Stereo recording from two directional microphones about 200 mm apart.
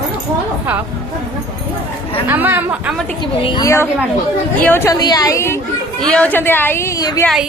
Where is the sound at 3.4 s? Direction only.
20° left (ahead or behind).